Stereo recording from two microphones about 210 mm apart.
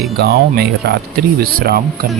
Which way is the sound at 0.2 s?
50° right (ahead or behind).